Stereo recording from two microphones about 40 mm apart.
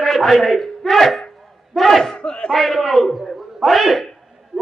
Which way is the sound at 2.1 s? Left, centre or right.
Left.